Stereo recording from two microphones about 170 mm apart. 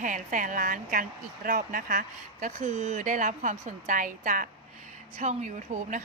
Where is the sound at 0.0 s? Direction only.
50° right (ahead or behind).